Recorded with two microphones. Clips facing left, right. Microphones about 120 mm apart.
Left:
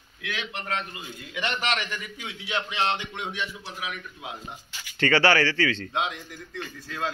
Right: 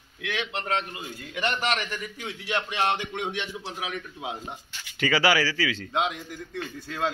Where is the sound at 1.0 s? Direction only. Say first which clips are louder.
Right 2 dB; 45° right (ahead or behind); by 3.4 s 60° right (ahead or behind).